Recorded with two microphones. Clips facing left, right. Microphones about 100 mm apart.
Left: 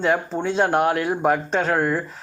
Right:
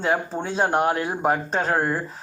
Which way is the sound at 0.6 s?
35° right (ahead or behind).